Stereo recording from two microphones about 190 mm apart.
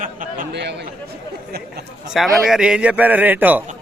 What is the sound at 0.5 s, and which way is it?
Speech, 65° right (ahead or behind).